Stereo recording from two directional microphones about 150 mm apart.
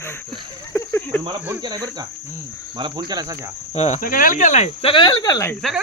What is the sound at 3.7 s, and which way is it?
Cricket, 45° left (ahead or behind).